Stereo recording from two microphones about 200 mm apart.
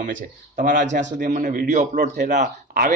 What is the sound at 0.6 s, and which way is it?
A man's voice, 40° right (ahead or behind).